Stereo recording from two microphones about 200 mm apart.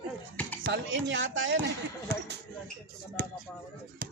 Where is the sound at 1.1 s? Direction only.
70° right (ahead or behind).